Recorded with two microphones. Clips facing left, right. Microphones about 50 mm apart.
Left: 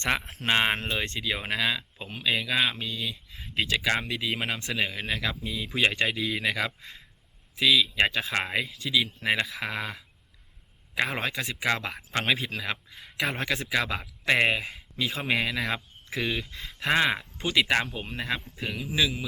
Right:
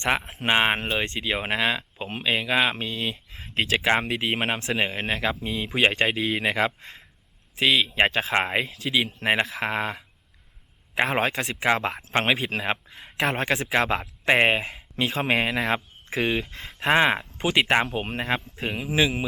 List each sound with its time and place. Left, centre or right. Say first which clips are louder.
0.0 s speech: right 3 dB; centre
2.6 s speech: right 4 dB; right
10.9 s speech: right 5 dB; right
11.6 s speech: right 5 dB; right
14.0 s speech: right 4 dB; right
15.2 s speech: right 4 dB; right